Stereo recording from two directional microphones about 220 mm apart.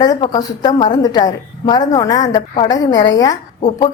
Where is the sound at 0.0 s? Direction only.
15° left (ahead or behind).